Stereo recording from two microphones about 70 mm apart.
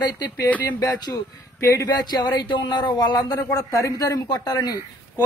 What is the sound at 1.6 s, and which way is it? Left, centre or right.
Speech, left.